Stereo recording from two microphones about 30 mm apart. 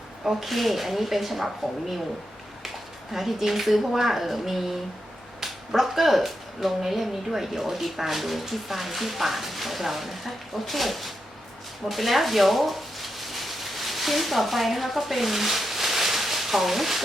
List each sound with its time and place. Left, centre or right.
0.3 s speech: centre
3.1 s speech: centre
11.9 s a sound: centre